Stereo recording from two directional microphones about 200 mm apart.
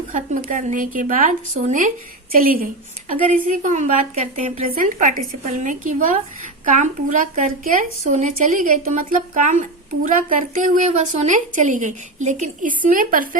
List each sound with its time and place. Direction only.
0.1 s speech: 40° right (ahead or behind)
4.7 s speech: 40° right (ahead or behind)